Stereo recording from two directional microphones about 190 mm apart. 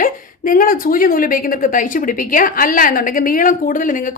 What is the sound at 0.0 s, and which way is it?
A woman's voice, 45° left (ahead or behind).